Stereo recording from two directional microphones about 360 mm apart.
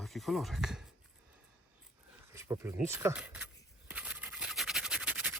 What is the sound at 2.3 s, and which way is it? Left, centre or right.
Speech, centre.